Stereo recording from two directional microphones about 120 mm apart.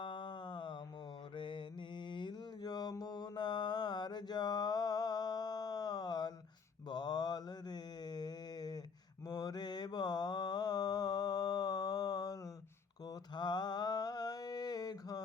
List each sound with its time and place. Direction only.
0.0 s music: 40° left (ahead or behind)
1.4 s mantra: 45° left (ahead or behind)